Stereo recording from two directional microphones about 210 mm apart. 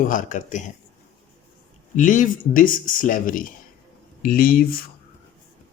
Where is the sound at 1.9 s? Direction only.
40° left (ahead or behind).